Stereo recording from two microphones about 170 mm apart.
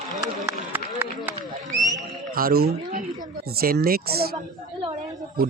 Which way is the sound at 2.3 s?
60° right (ahead or behind).